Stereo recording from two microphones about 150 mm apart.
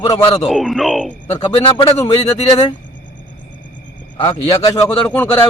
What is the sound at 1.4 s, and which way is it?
Speech, 35° left (ahead or behind).